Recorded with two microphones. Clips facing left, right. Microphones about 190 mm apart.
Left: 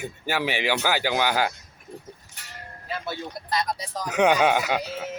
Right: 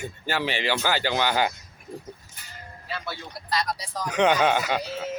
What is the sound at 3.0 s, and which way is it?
Speech, 20° left (ahead or behind).